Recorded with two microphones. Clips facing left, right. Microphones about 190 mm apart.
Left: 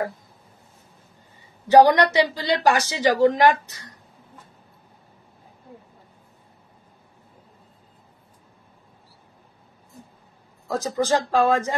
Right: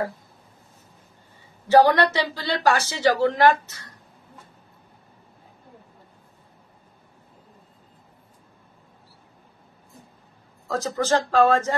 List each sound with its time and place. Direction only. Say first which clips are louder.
1.7 s a woman's voice: left 2 dB; 15° left (ahead or behind)
10.7 s a woman's voice: left 1 dB; 15° left (ahead or behind)